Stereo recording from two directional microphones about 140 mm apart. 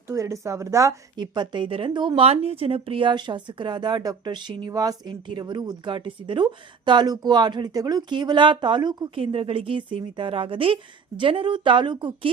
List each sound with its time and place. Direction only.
0.1 s a woman's voice: 20° right (ahead or behind)